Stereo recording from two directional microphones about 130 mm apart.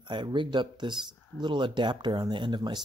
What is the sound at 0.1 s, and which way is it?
Speech, 35° right (ahead or behind).